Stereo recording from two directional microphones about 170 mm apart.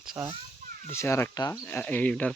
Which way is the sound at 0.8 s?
15° left (ahead or behind).